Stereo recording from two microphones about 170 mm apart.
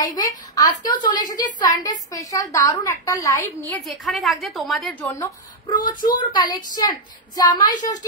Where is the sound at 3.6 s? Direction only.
Centre (ahead or behind).